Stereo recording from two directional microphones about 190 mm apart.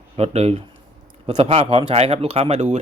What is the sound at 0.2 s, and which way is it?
Speech, 35° right (ahead or behind).